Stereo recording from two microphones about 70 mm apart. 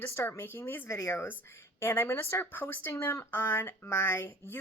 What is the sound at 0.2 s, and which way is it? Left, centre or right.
Speech, left.